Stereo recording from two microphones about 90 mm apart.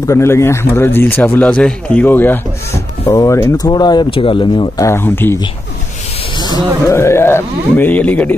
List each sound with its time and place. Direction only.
0.1 s speech: 30° left (ahead or behind)
1.4 s a man's voice: 15° left (ahead or behind)
3.1 s speech: 40° left (ahead or behind)
4.1 s speech: 75° left (ahead or behind)
4.7 s speech: 30° left (ahead or behind)
6.3 s a sound: 50° left (ahead or behind)
6.9 s speech: 30° left (ahead or behind)